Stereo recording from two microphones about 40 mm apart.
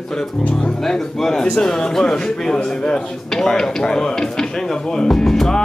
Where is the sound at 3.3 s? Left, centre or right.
Centre.